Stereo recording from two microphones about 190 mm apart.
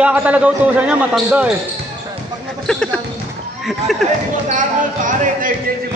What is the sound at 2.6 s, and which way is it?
Speech, 5° left (ahead or behind).